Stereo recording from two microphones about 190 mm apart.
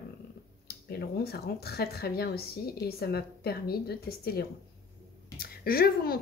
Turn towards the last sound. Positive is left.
turn(degrees=50)  # may be behind; listen again after turning